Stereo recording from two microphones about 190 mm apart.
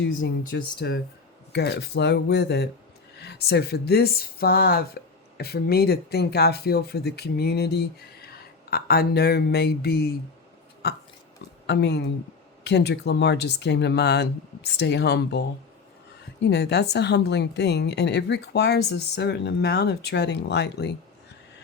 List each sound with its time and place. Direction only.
0.2 s speech: 60° left (ahead or behind)